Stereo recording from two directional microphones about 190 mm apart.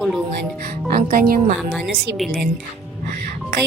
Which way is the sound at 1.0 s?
45° right (ahead or behind).